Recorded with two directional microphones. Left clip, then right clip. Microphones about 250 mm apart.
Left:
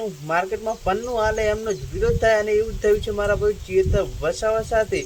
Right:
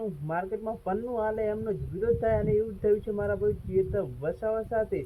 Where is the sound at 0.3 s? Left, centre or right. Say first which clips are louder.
Left 10 dB; centre.